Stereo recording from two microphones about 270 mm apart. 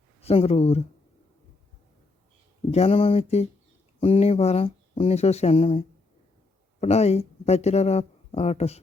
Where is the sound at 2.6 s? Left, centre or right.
Left.